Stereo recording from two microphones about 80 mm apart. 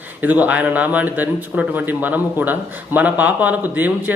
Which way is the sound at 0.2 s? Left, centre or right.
Right.